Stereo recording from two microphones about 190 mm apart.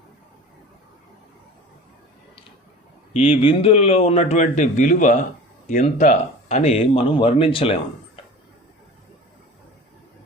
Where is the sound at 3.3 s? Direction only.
25° left (ahead or behind).